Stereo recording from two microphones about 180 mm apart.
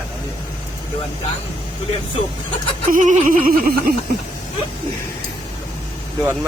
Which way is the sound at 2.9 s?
45° right (ahead or behind).